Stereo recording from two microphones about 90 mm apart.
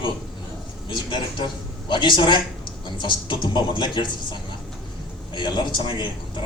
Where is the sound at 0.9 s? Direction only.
60° left (ahead or behind).